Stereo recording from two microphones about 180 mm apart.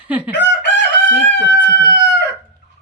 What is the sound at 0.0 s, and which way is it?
Chicken, 10° right (ahead or behind).